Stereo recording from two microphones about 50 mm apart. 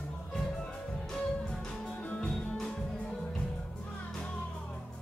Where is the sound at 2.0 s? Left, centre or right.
Left.